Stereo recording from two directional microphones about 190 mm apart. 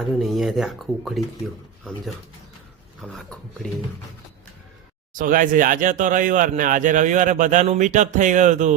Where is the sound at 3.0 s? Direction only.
5° left (ahead or behind).